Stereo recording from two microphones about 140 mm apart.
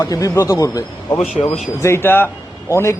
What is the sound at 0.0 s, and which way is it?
A man's voice, 25° left (ahead or behind).